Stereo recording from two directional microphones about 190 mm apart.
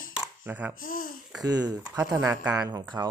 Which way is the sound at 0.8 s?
50° left (ahead or behind).